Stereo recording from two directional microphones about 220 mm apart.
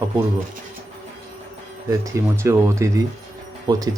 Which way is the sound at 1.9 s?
10° right (ahead or behind).